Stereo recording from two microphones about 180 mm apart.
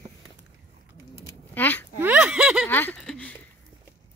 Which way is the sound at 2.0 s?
10° right (ahead or behind).